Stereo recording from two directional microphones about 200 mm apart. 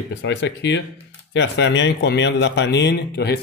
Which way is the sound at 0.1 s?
60° left (ahead or behind).